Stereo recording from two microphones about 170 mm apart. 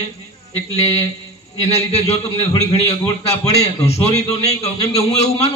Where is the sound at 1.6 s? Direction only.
40° left (ahead or behind).